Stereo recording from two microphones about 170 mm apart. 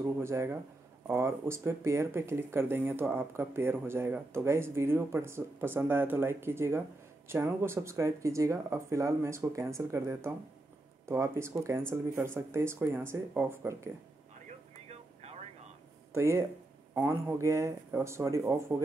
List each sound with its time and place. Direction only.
0.0 s speech: 15° right (ahead or behind)
16.1 s speech: 15° right (ahead or behind)